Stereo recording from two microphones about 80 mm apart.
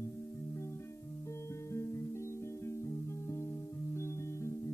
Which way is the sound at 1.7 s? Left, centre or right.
Left.